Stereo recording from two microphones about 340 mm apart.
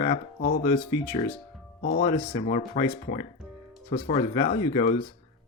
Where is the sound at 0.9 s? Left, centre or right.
Centre.